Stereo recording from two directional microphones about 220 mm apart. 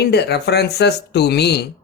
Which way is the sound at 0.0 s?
50° left (ahead or behind).